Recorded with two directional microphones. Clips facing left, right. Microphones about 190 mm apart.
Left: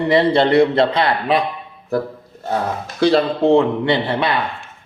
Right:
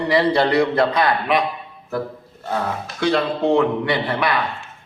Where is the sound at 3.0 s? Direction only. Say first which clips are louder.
Left 4 dB; 35° left (ahead or behind).